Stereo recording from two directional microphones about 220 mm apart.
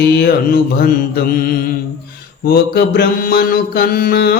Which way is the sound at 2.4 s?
45° left (ahead or behind).